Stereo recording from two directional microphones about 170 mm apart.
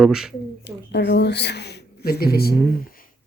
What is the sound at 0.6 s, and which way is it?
Speech, 75° left (ahead or behind).